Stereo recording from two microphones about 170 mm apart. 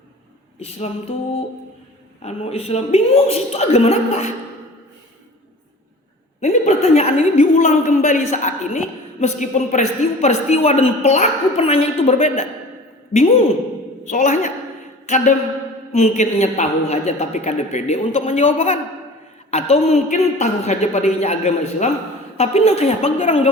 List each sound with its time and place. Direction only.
0.6 s speech: 35° left (ahead or behind)
6.4 s a woman's voice: 40° left (ahead or behind)
15.0 s a sound: 45° left (ahead or behind)
15.9 s speech: 40° left (ahead or behind)